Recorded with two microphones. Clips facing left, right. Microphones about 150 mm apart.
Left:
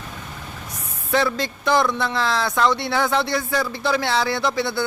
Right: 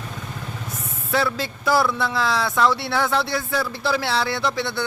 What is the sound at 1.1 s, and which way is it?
Speech, 5° right (ahead or behind).